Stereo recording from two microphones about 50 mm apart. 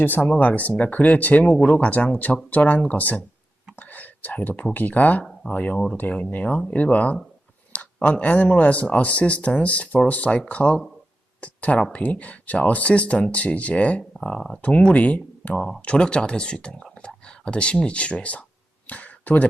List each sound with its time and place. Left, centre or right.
0.0 s speech: left
14.2 s speech: centre
14.6 s speech: left
18.9 s a sound: left